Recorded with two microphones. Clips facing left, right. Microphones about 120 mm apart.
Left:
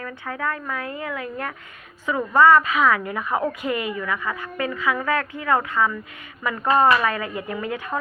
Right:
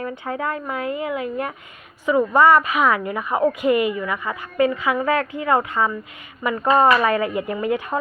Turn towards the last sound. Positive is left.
turn(degrees=-15)  # may be behind; listen again after turning